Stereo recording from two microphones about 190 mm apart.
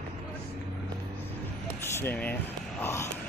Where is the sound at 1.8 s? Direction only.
10° left (ahead or behind).